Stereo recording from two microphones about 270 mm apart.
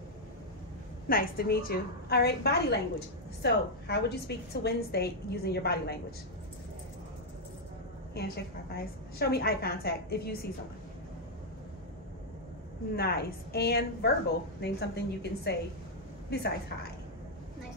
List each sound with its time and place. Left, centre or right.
1.0 s a woman's voice: left
8.7 s a woman's voice: left
12.9 s a woman's voice: left